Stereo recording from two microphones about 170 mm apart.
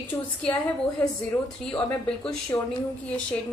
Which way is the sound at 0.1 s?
20° left (ahead or behind).